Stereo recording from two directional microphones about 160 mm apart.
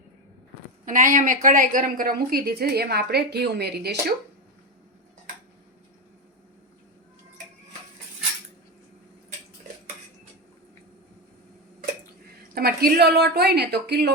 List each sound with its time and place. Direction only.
0.9 s a woman's voice: 55° right (ahead or behind); by 3.9 s 90° right
12.5 s a woman's voice: 75° right (ahead or behind); by 14.1 s 90° right